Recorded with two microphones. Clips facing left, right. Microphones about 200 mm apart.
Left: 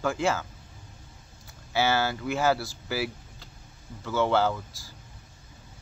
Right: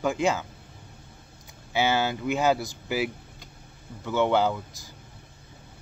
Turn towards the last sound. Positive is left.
turn(degrees=-20)  # may be behind; listen again after turning